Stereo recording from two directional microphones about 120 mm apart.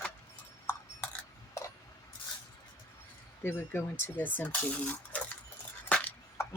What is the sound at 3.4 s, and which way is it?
Speech, 20° left (ahead or behind).